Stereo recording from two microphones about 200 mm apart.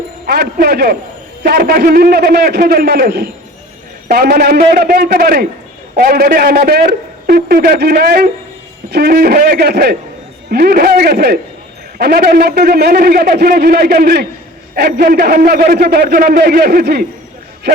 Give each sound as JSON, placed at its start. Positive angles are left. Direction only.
{"t": 0.3, "sound": "a man's voice", "side_deg": -50}